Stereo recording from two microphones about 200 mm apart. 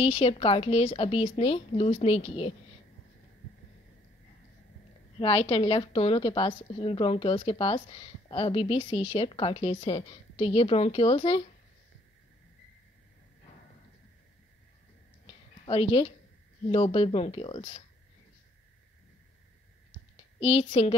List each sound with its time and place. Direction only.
0.0 s a woman's voice: 30° left (ahead or behind)
5.2 s a woman's voice: 25° left (ahead or behind)
15.2 s a sound: 25° left (ahead or behind)
16.7 s a woman's voice: 30° left (ahead or behind)
20.3 s a woman's voice: 30° left (ahead or behind)